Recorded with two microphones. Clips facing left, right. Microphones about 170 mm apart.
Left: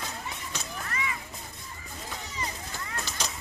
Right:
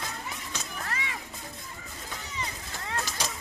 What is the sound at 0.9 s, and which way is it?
Music, 85° right.